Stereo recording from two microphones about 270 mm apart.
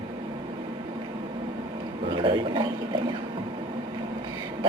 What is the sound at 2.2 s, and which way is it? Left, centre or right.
Speech, centre.